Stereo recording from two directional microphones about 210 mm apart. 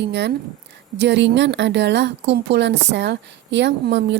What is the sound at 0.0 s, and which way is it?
A woman's voice, 55° right (ahead or behind).